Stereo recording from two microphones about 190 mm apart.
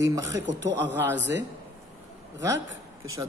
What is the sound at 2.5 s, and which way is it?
Speech, 85° right.